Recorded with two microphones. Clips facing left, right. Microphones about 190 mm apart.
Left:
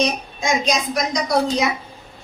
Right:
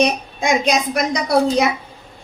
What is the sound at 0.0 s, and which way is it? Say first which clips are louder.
A woman's voice: right 4 dB; 60° right (ahead or behind).